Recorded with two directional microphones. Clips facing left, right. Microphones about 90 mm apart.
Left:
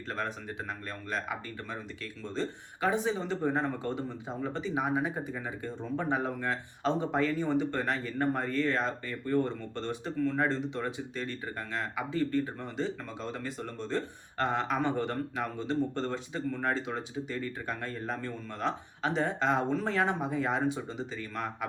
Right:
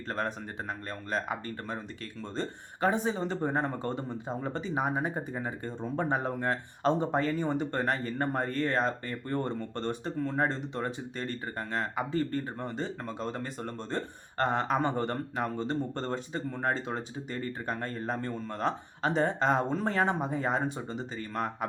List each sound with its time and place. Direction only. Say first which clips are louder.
0.1 s speech: right 2 dB; 40° right (ahead or behind)
16.5 s speech: even; 30° right (ahead or behind)
16.7 s speech: left 1 dB; 40° right (ahead or behind)